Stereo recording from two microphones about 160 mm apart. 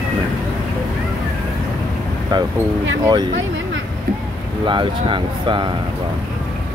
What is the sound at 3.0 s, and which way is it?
Speech, 25° right (ahead or behind).